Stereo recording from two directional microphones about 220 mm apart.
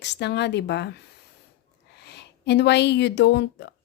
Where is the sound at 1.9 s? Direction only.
50° left (ahead or behind).